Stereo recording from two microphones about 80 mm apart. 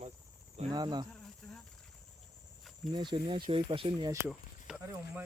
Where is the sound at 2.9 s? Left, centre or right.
Right.